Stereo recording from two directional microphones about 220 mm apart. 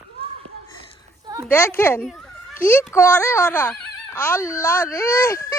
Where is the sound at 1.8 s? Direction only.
10° left (ahead or behind).